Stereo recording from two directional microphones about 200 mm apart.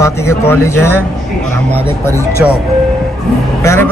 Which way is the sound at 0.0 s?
15° left (ahead or behind).